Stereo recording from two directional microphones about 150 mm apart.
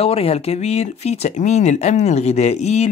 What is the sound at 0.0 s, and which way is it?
Speech, 40° left (ahead or behind).